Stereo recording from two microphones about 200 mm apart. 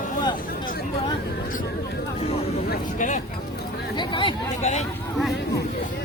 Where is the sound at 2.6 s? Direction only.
40° left (ahead or behind).